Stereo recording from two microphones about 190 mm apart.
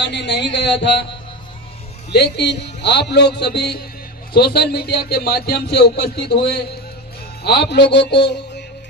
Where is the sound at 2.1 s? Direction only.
60° left (ahead or behind).